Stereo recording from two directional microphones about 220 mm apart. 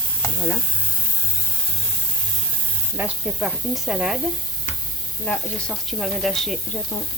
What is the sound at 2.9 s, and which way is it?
Speech, 5° right (ahead or behind).